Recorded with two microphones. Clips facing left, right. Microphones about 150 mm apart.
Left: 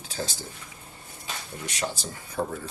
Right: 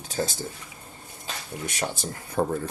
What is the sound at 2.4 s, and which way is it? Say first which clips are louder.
Speech: right 5 dB; 55° right (ahead or behind).